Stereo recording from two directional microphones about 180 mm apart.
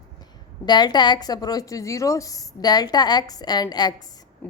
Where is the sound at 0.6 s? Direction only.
25° left (ahead or behind).